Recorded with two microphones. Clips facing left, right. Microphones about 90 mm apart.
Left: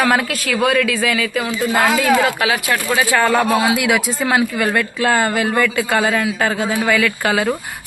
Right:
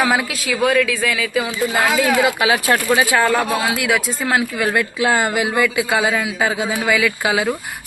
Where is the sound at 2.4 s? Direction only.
30° right (ahead or behind).